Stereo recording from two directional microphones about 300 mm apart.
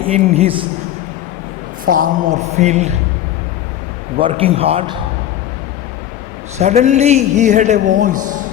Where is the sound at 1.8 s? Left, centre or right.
Right.